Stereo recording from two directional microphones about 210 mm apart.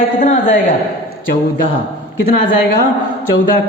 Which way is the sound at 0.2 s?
35° left (ahead or behind).